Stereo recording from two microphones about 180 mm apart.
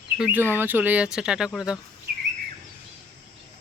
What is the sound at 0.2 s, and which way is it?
Speech, 10° right (ahead or behind).